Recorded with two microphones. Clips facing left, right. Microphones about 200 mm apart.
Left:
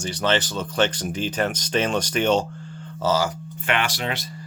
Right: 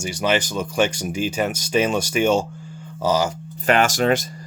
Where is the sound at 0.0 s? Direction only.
10° right (ahead or behind).